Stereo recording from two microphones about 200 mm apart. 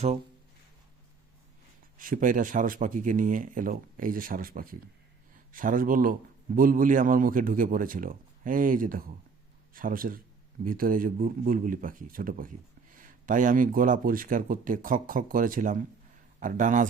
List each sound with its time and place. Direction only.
2.0 s a man's voice: 45° right (ahead or behind)